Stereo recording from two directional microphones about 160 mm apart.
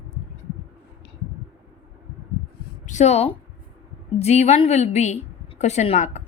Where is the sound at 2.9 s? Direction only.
45° left (ahead or behind).